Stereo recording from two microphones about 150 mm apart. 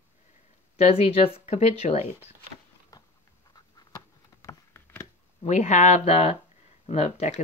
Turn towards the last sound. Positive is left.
turn(degrees=50)  # may be behind; listen again after turning